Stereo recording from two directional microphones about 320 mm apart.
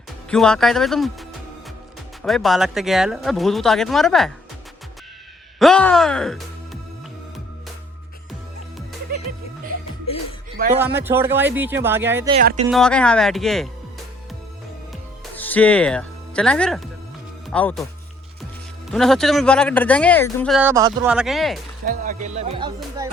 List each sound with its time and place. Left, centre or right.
0.3 s speech: centre
2.2 s speech: centre
5.5 s speech: centre
10.8 s speech: centre
12.4 s speech: right
12.7 s speech: centre
15.4 s speech: centre
18.9 s speech: centre
21.8 s speech: right